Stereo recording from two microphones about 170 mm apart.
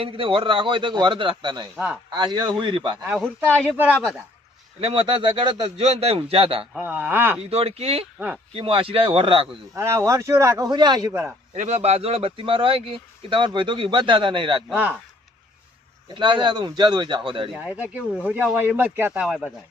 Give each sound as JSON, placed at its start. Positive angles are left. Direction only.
{"t": 0.0, "sound": "a man's voice", "side_deg": -30}
{"t": 1.7, "sound": "speech", "side_deg": -10}
{"t": 2.0, "sound": "a man's voice", "side_deg": -25}
{"t": 3.0, "sound": "speech", "side_deg": -5}
{"t": 4.8, "sound": "speech", "side_deg": -30}
{"t": 6.7, "sound": "speech", "side_deg": -5}
{"t": 7.5, "sound": "speech", "side_deg": -35}
{"t": 9.7, "sound": "speech", "side_deg": -15}
{"t": 11.5, "sound": "speech", "side_deg": -45}
{"t": 14.7, "sound": "speech", "side_deg": -10}
{"t": 16.1, "sound": "a man's voice", "side_deg": -25}
{"t": 17.5, "sound": "speech", "side_deg": -10}